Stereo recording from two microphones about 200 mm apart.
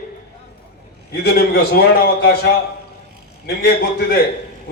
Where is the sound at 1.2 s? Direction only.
50° left (ahead or behind).